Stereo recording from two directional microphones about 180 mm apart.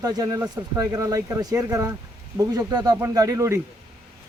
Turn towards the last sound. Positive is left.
turn(degrees=-15)  # may be behind; listen again after turning